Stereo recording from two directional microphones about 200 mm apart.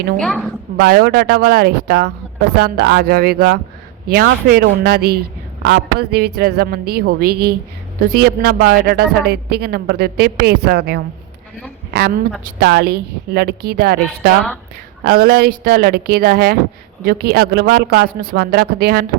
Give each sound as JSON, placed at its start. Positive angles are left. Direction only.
{"t": 0.2, "sound": "a woman's voice", "side_deg": 0}
{"t": 0.8, "sound": "speech", "side_deg": -50}
{"t": 12.6, "sound": "speech", "side_deg": -50}
{"t": 15.0, "sound": "speech", "side_deg": -50}